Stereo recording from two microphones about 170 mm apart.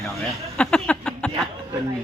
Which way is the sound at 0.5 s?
5° left (ahead or behind).